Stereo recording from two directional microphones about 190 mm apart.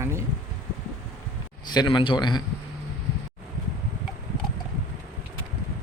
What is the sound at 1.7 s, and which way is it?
Speech, 25° left (ahead or behind).